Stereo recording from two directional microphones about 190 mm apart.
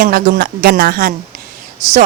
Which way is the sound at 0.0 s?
55° right (ahead or behind).